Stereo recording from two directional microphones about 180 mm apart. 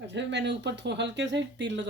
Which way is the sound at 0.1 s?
80° right.